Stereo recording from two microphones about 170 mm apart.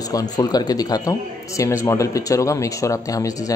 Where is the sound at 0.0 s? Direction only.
20° left (ahead or behind).